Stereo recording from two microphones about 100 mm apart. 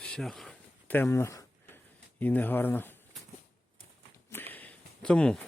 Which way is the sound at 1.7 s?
15° left (ahead or behind).